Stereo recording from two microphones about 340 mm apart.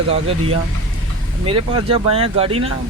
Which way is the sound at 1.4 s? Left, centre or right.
Centre.